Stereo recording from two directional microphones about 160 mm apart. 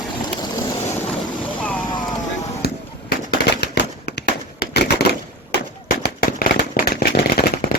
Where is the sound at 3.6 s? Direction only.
90° left.